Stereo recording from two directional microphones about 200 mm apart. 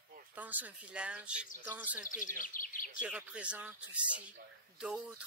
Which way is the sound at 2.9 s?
5° right (ahead or behind).